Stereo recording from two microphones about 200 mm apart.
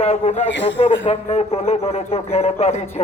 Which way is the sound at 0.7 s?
30° left (ahead or behind).